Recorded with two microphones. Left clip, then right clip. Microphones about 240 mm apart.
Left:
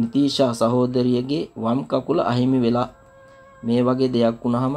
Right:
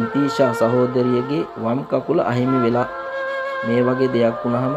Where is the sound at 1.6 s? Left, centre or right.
Centre.